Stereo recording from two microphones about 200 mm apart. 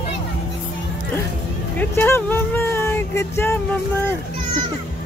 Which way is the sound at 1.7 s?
10° left (ahead or behind).